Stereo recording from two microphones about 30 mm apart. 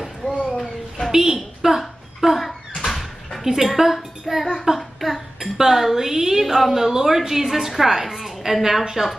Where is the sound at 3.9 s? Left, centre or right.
Centre.